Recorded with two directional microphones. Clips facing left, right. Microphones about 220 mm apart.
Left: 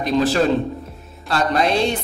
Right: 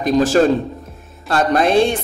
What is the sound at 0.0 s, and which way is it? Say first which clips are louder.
A man's voice: right 4 dB; 45° right (ahead or behind).